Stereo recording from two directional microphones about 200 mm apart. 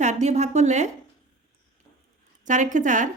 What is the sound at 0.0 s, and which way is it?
Speech, 35° right (ahead or behind).